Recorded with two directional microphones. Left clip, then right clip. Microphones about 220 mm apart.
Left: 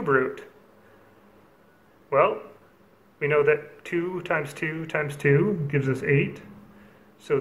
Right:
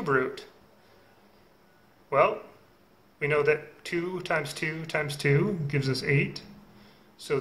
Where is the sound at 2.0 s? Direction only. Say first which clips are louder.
Left 2 dB; 20° right (ahead or behind).